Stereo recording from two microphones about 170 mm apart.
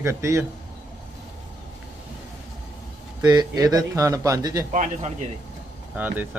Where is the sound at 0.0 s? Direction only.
15° right (ahead or behind).